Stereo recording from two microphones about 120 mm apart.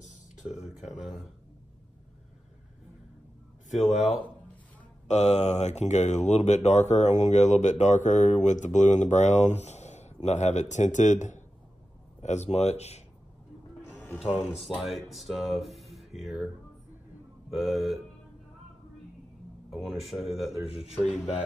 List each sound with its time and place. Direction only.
0.0 s a sound: 75° left (ahead or behind)
0.8 s speech: centre (ahead or behind)
3.7 s speech: 70° left (ahead or behind)
5.0 s speech: 65° left (ahead or behind); by 11.4 s 90° left
12.2 s speech: 70° left (ahead or behind)
13.9 s music: 15° left (ahead or behind)
14.8 s speech: centre (ahead or behind)
15.1 s music: centre (ahead or behind)
17.5 s speech: centre (ahead or behind)
19.7 s speech: 5° right (ahead or behind)
20.6 s speech: 55° left (ahead or behind)